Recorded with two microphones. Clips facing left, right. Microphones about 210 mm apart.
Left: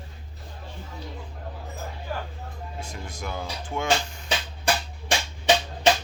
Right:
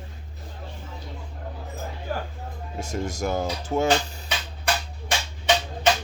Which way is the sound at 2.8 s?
45° right (ahead or behind).